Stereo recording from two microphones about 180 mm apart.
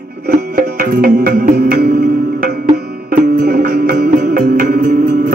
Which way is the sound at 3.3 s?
50° right (ahead or behind).